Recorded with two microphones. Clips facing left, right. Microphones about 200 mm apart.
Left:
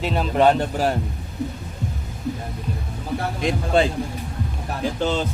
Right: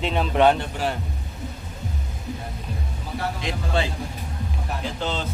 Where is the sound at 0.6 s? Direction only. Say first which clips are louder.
Left 5 dB; 40° left (ahead or behind).